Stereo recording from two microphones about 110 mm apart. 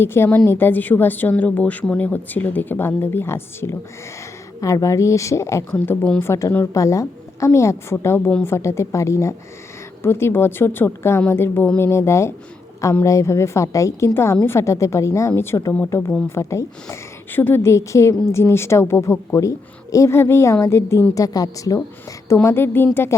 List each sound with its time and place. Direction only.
0.0 s a woman's voice: 20° left (ahead or behind)